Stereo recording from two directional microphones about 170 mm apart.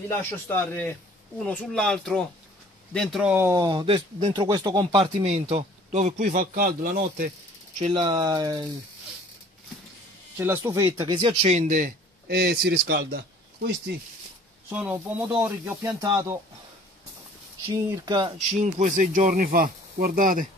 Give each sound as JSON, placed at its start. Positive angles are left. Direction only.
{"t": 0.5, "sound": "speech", "side_deg": 15}
{"t": 4.9, "sound": "a man's voice", "side_deg": -40}
{"t": 7.9, "sound": "speech", "side_deg": -25}
{"t": 10.3, "sound": "speech", "side_deg": -15}
{"t": 10.9, "sound": "a man's voice", "side_deg": -30}
{"t": 14.7, "sound": "speech", "side_deg": -10}
{"t": 17.8, "sound": "speech", "side_deg": -20}
{"t": 18.5, "sound": "a man's voice", "side_deg": -45}